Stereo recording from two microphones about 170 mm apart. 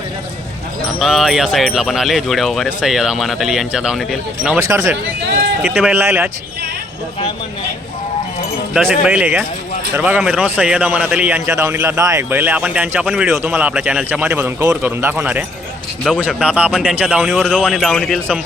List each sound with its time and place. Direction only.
0.9 s speech: centre (ahead or behind)
4.5 s a man's voice: 15° right (ahead or behind)
8.7 s a man's voice: 5° right (ahead or behind)